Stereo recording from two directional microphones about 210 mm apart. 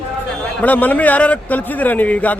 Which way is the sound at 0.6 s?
10° left (ahead or behind).